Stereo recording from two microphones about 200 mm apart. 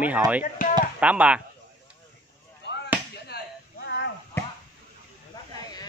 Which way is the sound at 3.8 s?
60° left (ahead or behind).